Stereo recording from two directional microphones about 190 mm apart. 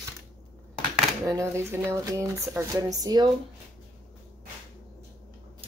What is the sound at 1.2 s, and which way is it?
Speech, 15° right (ahead or behind).